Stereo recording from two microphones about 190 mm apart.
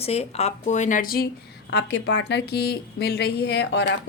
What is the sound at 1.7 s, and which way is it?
A woman's voice, 70° left (ahead or behind).